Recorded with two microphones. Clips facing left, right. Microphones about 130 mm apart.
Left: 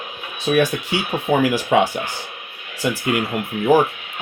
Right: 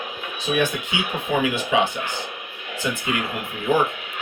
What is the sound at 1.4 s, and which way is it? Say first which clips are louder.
Speech: left 4 dB; 65° left (ahead or behind).